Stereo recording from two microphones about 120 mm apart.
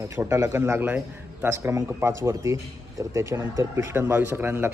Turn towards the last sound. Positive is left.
turn(degrees=-20)  # may be behind; listen again after turning